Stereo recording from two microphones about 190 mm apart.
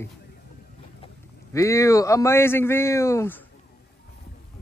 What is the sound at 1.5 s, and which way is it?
Speech, 15° left (ahead or behind).